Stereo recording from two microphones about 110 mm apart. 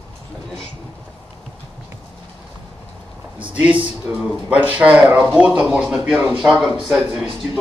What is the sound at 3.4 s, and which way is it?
Speech, 15° right (ahead or behind).